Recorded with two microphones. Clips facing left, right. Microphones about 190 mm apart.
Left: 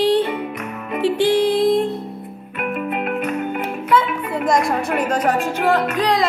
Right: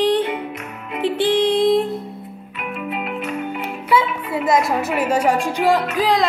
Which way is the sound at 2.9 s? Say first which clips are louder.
Left 1 dB; 50° left (ahead or behind).